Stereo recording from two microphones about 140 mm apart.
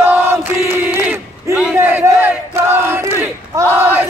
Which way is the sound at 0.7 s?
10° right (ahead or behind).